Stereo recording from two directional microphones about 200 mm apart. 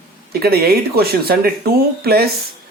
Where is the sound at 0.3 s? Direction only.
50° right (ahead or behind).